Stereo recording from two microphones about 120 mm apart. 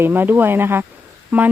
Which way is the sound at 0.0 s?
15° right (ahead or behind).